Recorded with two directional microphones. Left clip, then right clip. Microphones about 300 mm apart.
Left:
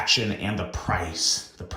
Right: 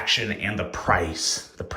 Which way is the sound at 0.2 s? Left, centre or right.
Centre.